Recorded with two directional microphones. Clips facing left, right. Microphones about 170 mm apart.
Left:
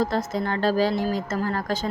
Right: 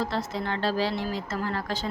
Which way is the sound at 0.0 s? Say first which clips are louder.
Left 5 dB; 45° left (ahead or behind).